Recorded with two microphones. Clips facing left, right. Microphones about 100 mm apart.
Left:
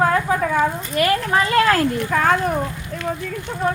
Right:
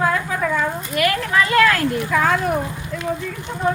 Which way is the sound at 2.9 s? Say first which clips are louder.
Right 3 dB; 45° left (ahead or behind).